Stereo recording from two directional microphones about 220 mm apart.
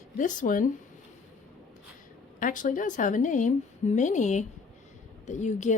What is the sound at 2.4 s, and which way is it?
A woman's voice, 35° left (ahead or behind).